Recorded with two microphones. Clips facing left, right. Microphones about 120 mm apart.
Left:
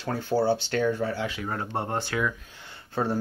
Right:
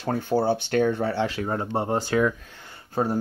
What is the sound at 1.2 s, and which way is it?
Speech, 30° right (ahead or behind).